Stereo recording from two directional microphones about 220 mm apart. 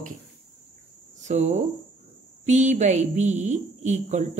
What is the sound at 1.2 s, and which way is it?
A woman's voice, 30° right (ahead or behind).